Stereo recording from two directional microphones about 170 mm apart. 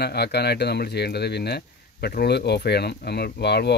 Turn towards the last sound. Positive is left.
turn(degrees=75)  # may be behind; listen again after turning